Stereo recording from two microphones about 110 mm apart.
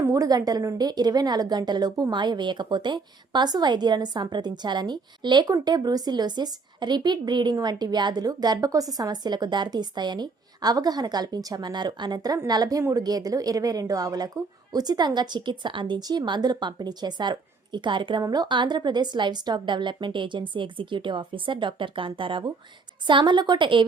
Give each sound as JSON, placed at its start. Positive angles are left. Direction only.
{"t": 0.0, "sound": "a woman's voice", "side_deg": -30}